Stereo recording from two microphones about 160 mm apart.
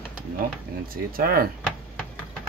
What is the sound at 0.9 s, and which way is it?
Speech, 65° right (ahead or behind).